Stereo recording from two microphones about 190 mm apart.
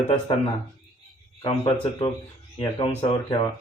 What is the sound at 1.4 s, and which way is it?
Speech, 30° left (ahead or behind).